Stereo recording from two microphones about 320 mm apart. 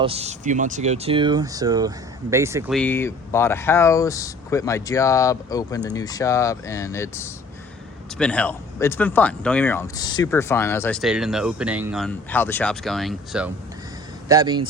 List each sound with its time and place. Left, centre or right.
0.0 s speech: centre
2.7 s speech: centre
14.3 s speech: centre